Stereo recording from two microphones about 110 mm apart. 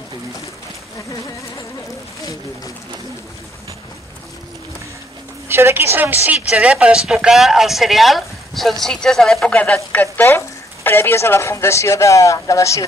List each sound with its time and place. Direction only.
5.5 s a woman's voice: 20° right (ahead or behind); by 12.8 s 30° left (ahead or behind)